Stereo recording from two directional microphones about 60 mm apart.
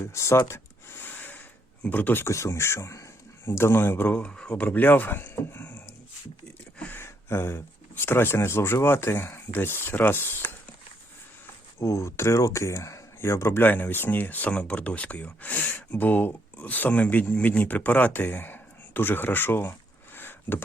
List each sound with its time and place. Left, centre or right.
0.0 s a sound: left
1.9 s speech: left
2.2 s speech: left
4.2 s speech: centre; by 5.9 s left
6.9 s speech: left
11.8 s speech: left
13.6 s speech: left
14.5 s speech: centre; by 19.7 s left
20.1 s a sound: left